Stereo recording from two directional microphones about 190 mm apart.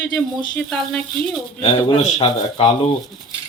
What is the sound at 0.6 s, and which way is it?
Speech, centre (ahead or behind).